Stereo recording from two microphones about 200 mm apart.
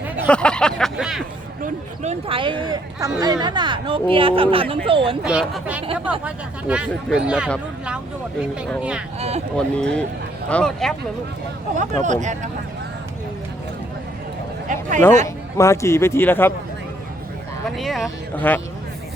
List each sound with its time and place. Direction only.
0.3 s speech: 5° left (ahead or behind)
1.6 s speech: 30° right (ahead or behind)
5.2 s speech: 5° right (ahead or behind)
9.1 s speech: 30° right (ahead or behind)
9.6 s speech: 5° left (ahead or behind)
12.0 s speech: 35° right (ahead or behind)
14.7 s speech: 40° right (ahead or behind)
15.5 s a man's voice: 15° left (ahead or behind)
17.7 s speech: centre (ahead or behind)